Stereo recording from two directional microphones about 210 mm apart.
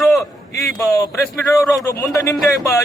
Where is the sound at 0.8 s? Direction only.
15° left (ahead or behind).